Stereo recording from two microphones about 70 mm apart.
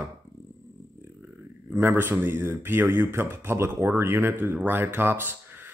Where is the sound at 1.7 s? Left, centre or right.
Right.